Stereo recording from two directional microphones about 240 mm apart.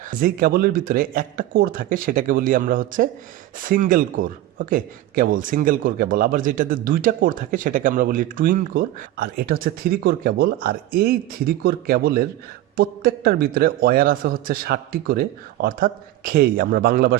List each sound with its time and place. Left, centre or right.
0.1 s a man's voice: right